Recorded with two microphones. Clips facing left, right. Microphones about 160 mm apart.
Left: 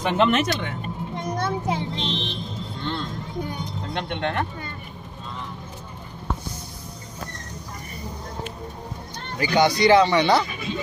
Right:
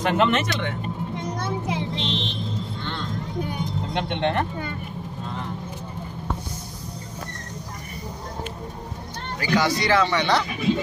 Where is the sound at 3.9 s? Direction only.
20° right (ahead or behind).